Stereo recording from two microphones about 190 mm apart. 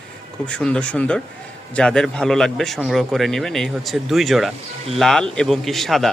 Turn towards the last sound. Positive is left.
turn(degrees=0)  # may be behind; listen again after turning